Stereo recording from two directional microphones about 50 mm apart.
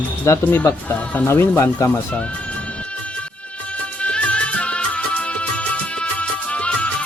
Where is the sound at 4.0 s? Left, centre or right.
Left.